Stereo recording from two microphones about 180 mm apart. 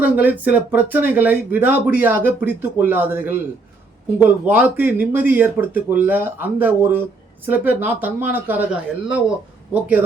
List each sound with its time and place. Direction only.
0.0 s speech: 10° right (ahead or behind)